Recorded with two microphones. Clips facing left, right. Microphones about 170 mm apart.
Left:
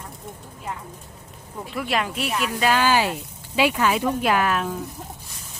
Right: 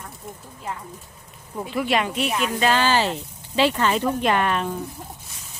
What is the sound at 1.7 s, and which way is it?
Speech, centre (ahead or behind).